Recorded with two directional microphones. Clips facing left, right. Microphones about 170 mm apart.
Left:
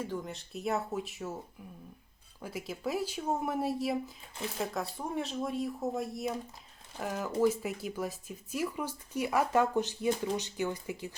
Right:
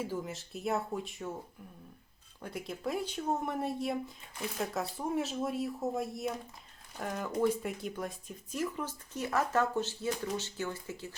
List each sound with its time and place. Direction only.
0.0 s speech: 5° right (ahead or behind)
2.4 s speech: 5° left (ahead or behind)